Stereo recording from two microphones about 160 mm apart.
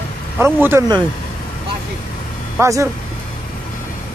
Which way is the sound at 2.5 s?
20° right (ahead or behind).